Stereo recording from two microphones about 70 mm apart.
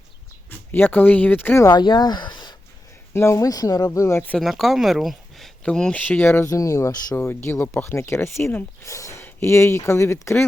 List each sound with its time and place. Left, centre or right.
0.7 s speech: left
1.7 s speech: left
3.1 s speech: left
3.4 s speech: left
4.4 s speech: centre
5.6 s speech: centre
6.0 s speech: left
6.5 s speech: left
7.3 s speech: left
8.8 s speech: left